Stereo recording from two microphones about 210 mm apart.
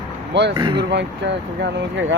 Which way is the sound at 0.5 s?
20° right (ahead or behind).